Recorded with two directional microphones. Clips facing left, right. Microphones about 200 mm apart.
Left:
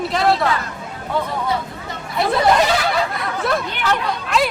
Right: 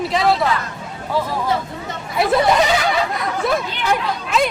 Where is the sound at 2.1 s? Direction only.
Centre (ahead or behind).